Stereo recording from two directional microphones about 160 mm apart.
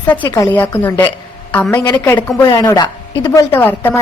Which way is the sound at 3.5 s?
10° left (ahead or behind).